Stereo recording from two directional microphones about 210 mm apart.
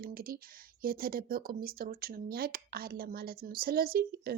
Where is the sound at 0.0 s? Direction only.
45° right (ahead or behind).